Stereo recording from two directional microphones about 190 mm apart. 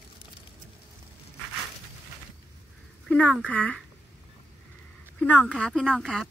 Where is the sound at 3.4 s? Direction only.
5° left (ahead or behind).